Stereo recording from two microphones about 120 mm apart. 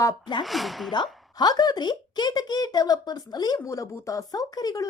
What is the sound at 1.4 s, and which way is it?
A woman's voice, 35° left (ahead or behind).